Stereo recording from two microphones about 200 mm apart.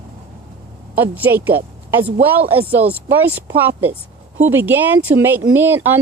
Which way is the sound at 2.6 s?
10° right (ahead or behind).